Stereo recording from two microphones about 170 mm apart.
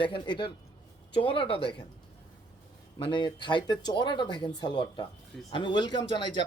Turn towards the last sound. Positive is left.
turn(degrees=25)  # may be behind; listen again after turning